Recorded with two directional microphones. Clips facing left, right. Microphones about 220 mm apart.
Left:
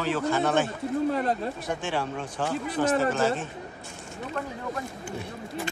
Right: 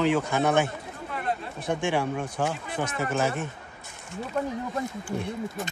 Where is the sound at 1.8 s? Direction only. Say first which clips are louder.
Right 5 dB; 10° right (ahead or behind).